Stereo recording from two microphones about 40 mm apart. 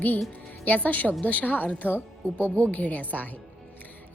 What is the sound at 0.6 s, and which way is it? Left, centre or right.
A woman's voice, left.